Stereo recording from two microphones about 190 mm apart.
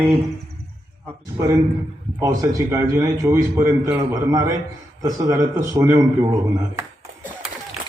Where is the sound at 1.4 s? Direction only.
15° right (ahead or behind).